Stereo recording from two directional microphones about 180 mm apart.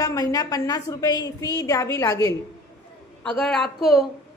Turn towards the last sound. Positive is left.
turn(degrees=0)  # may be behind; listen again after turning